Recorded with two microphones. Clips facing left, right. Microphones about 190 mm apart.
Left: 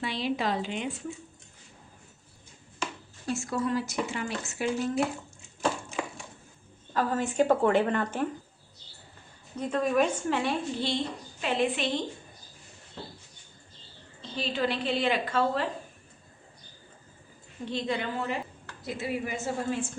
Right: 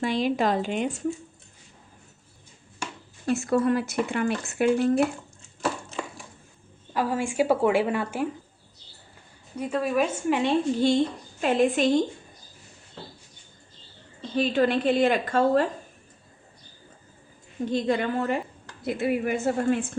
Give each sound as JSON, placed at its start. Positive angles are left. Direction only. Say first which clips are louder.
{"t": 0.0, "sound": "a woman's voice", "louder": "right 6 dB", "side_deg": -45}
{"t": 3.2, "sound": "speech", "louder": "right 7 dB", "side_deg": -60}
{"t": 6.9, "sound": "a woman's voice", "louder": "right 2 dB", "side_deg": -10}
{"t": 9.6, "sound": "a woman's voice", "louder": "right 1 dB", "side_deg": -10}
{"t": 10.8, "sound": "a woman's voice", "louder": "right 9 dB", "side_deg": -45}
{"t": 14.2, "sound": "a woman's voice", "louder": "right 8 dB", "side_deg": -50}
{"t": 17.7, "sound": "a woman's voice", "louder": "right 6 dB", "side_deg": -45}